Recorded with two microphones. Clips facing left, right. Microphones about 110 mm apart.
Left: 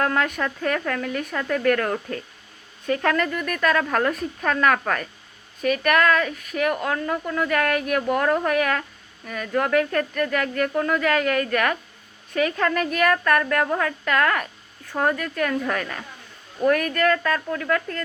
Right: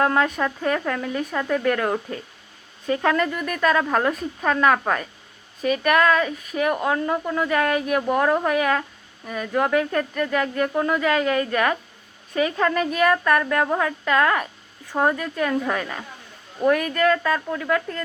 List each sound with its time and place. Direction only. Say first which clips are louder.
0.0 s a woman's voice: right 3 dB; 20° right (ahead or behind)